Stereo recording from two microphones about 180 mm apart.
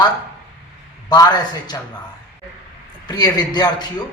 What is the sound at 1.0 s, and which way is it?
Speech, 20° left (ahead or behind).